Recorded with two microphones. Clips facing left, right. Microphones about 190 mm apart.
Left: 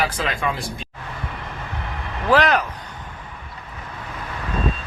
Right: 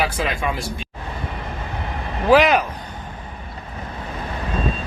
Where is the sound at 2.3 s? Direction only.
10° right (ahead or behind).